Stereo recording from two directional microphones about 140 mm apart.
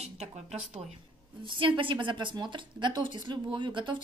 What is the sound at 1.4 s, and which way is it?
A woman's voice, 35° right (ahead or behind).